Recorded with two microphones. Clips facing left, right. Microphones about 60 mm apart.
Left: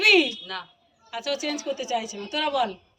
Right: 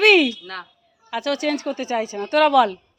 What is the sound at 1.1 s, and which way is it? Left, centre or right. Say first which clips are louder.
A woman's voice: right 6 dB; right.